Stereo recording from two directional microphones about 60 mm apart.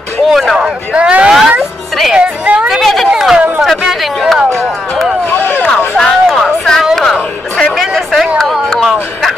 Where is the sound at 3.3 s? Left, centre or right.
Right.